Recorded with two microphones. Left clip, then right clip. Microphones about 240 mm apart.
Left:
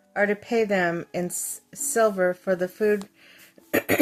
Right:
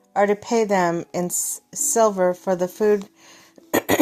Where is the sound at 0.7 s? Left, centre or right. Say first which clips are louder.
Right 4 dB; centre.